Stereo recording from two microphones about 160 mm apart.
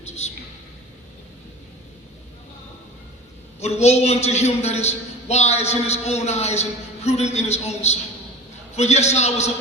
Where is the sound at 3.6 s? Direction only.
45° left (ahead or behind).